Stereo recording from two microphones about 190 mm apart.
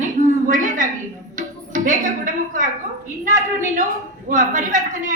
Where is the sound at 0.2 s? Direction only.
45° right (ahead or behind).